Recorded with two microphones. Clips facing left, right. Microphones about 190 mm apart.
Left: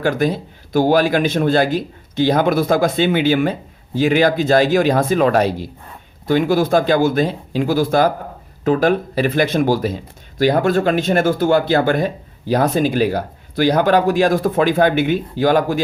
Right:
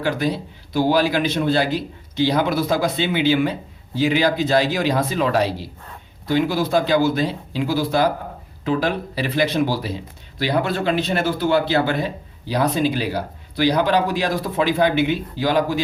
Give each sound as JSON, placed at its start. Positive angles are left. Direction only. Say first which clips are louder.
{"t": 0.0, "sound": "speech", "louder": "left 4 dB", "side_deg": 50}